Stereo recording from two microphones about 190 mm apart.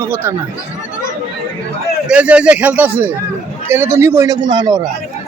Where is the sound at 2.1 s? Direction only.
5° right (ahead or behind).